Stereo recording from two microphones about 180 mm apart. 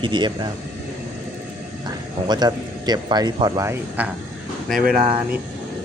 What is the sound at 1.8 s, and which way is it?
A man's voice, 25° right (ahead or behind).